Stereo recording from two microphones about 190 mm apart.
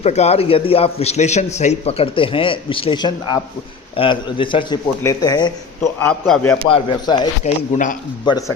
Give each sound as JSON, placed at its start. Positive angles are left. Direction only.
{"t": 0.0, "sound": "a man's voice", "side_deg": 35}
{"t": 6.1, "sound": "a man's voice", "side_deg": 5}
{"t": 6.7, "sound": "a man's voice", "side_deg": 25}
{"t": 7.4, "sound": "a man's voice", "side_deg": 40}
{"t": 8.2, "sound": "a man's voice", "side_deg": 20}